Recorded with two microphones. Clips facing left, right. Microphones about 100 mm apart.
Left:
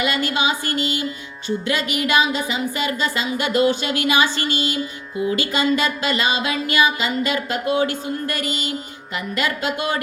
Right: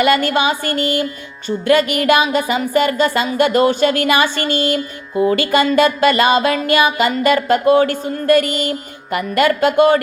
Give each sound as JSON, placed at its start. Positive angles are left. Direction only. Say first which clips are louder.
{"t": 0.3, "sound": "music", "louder": "right 5 dB", "side_deg": -55}
{"t": 4.0, "sound": "a sound", "louder": "right 4 dB", "side_deg": -55}
{"t": 9.1, "sound": "music", "louder": "right 9 dB", "side_deg": -55}